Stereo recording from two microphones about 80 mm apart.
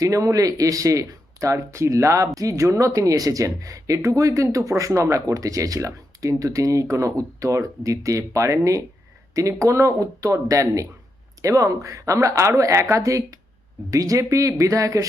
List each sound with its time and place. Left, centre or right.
0.0 s speech: right